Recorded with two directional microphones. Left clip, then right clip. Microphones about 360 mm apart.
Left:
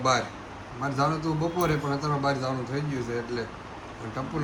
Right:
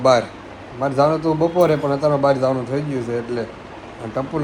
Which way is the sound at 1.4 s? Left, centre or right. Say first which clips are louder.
Right 11 dB; right.